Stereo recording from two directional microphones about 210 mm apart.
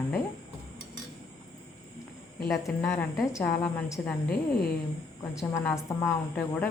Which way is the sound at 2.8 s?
15° left (ahead or behind).